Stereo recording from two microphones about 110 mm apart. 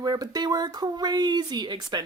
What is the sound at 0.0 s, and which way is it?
Speech, 35° right (ahead or behind).